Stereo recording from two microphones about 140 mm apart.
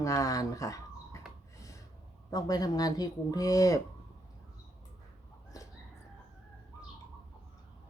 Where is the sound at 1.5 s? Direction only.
25° left (ahead or behind).